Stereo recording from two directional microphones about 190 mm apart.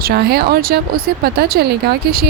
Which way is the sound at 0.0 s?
55° right (ahead or behind).